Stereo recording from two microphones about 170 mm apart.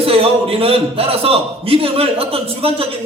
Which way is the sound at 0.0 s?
35° right (ahead or behind).